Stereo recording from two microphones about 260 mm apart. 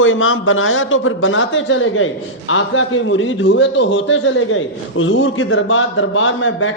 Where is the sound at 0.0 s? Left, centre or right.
Left.